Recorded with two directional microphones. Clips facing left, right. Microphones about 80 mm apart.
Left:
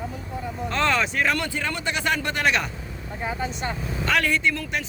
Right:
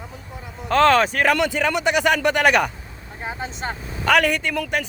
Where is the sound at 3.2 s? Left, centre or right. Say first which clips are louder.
Even; right.